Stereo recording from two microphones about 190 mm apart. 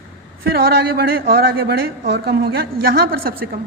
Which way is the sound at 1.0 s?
55° right (ahead or behind).